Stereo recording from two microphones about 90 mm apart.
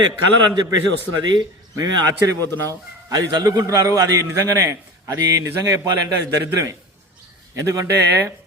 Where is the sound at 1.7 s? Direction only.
45° right (ahead or behind).